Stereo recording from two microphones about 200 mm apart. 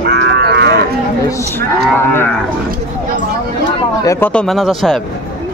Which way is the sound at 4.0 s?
15° left (ahead or behind).